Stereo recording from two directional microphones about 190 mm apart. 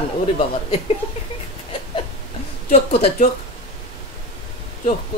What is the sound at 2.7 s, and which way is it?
Speech, 35° left (ahead or behind).